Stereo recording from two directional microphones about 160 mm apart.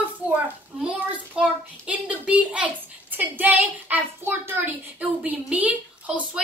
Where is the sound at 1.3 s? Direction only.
5° right (ahead or behind).